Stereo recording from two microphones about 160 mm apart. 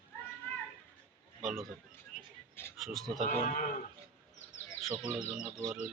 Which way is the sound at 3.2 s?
55° left (ahead or behind).